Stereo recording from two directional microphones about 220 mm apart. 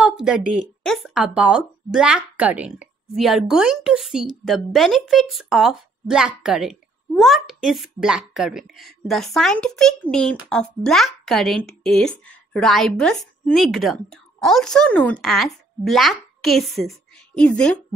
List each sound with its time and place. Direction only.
0.0 s speech: 5° right (ahead or behind)